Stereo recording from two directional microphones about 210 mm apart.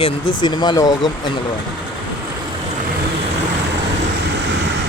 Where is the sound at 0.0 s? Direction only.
20° left (ahead or behind).